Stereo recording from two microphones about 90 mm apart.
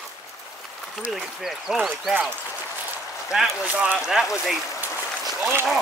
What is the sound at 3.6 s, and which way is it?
Speech, 15° right (ahead or behind).